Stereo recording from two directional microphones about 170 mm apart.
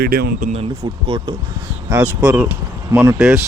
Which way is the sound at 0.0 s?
65° right (ahead or behind).